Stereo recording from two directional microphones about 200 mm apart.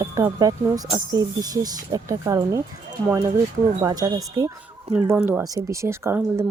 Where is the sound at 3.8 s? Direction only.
20° right (ahead or behind).